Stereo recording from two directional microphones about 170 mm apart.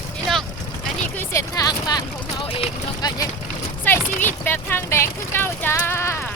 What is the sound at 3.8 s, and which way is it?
Speech, 10° left (ahead or behind).